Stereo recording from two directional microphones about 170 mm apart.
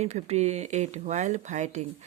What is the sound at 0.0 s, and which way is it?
Speech, 40° right (ahead or behind).